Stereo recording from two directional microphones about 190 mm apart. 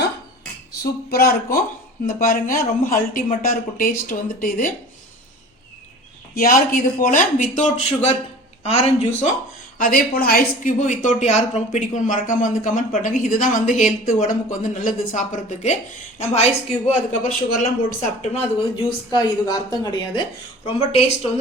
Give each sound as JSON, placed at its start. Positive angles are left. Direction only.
{"t": 0.8, "sound": "speech", "side_deg": 55}
{"t": 6.3, "sound": "speech", "side_deg": 50}
{"t": 9.7, "sound": "speech", "side_deg": 50}
{"t": 19.1, "sound": "a woman's voice", "side_deg": 20}
{"t": 20.7, "sound": "speech", "side_deg": 35}